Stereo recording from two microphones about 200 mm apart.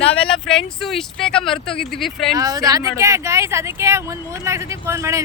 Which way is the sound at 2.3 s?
15° right (ahead or behind).